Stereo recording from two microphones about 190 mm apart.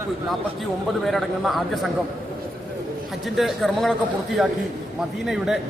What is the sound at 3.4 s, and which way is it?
Speech, centre (ahead or behind).